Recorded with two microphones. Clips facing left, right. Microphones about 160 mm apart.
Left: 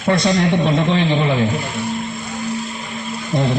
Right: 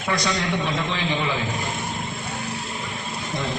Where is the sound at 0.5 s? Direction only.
55° left (ahead or behind).